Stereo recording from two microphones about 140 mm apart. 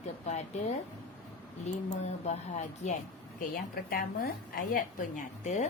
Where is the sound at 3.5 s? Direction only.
90° left.